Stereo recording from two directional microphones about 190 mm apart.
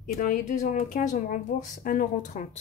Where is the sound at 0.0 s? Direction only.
45° left (ahead or behind).